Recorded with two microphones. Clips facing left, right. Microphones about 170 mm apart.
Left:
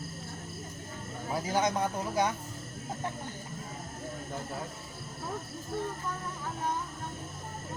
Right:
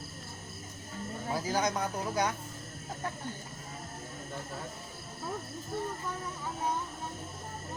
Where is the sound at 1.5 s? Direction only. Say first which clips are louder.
Left 3 dB; 25° left (ahead or behind).